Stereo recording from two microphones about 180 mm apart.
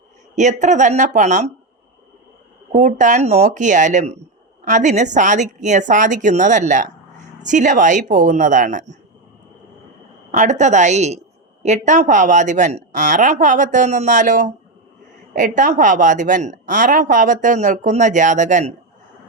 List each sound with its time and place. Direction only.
0.3 s speech: 40° right (ahead or behind)
2.7 s a woman's voice: 45° right (ahead or behind)
10.3 s a woman's voice: 40° right (ahead or behind)